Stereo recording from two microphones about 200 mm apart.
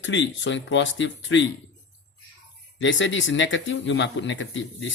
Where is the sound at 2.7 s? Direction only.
70° left (ahead or behind).